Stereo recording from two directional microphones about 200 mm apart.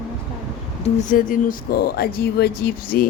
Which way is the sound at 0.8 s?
40° left (ahead or behind).